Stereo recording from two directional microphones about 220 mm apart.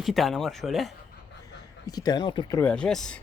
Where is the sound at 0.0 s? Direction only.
Centre (ahead or behind).